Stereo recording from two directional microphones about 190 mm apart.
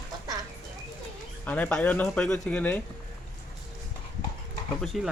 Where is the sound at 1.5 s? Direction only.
10° left (ahead or behind).